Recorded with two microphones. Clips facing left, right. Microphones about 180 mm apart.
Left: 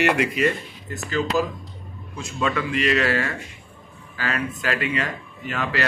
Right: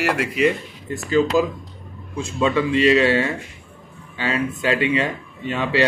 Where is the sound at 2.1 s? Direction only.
25° right (ahead or behind).